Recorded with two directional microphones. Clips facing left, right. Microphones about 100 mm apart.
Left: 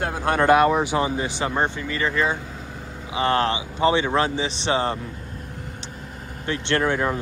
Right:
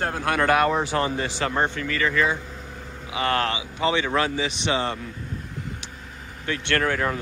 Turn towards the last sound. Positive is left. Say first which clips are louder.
# left 2 dB
turn(degrees=20)  # may be behind; listen again after turning